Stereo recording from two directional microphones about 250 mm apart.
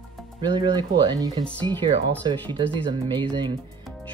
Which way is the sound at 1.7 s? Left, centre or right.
Centre.